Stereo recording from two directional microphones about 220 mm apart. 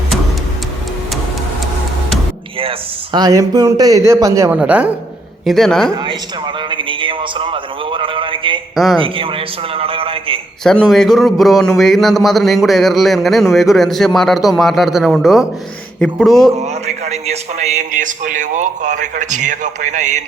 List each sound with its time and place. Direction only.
2.6 s a man's voice: 20° right (ahead or behind); by 5.9 s centre (ahead or behind)
5.9 s a man's voice: 20° right (ahead or behind)
8.7 s speech: centre (ahead or behind)
9.0 s a man's voice: 25° right (ahead or behind)
10.6 s a man's voice: centre (ahead or behind)
16.6 s a man's voice: 30° right (ahead or behind)